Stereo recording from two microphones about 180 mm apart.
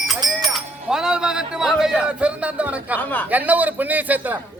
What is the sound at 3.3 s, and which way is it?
A man's voice, 10° right (ahead or behind).